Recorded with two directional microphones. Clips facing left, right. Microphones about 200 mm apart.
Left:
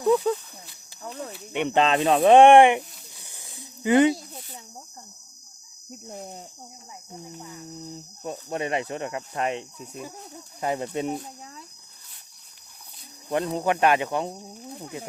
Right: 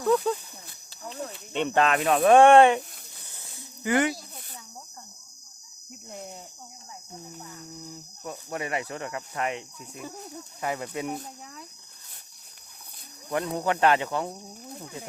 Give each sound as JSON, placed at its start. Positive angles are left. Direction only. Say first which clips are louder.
{"t": 0.0, "sound": "speech", "louder": "left 2 dB", "side_deg": 15}
{"t": 3.2, "sound": "a sound", "louder": "left 2 dB", "side_deg": 15}
{"t": 7.3, "sound": "speech", "louder": "left 3 dB", "side_deg": 15}
{"t": 8.2, "sound": "speech", "louder": "left 4 dB", "side_deg": 25}
{"t": 13.3, "sound": "speech", "louder": "left 3 dB", "side_deg": 25}